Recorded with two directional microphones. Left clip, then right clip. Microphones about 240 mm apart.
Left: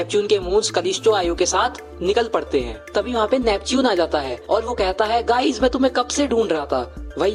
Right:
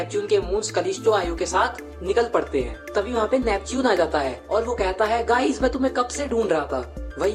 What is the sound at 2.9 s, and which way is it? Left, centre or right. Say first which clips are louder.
Speech: left 3 dB; left.